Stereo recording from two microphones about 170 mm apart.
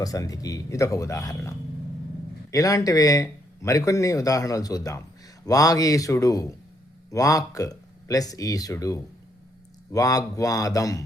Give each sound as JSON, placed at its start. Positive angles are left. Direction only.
{"t": 0.0, "sound": "speech", "side_deg": 20}